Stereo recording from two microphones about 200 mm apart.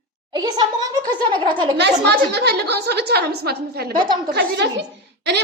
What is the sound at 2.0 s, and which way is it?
A woman's voice, 55° right (ahead or behind).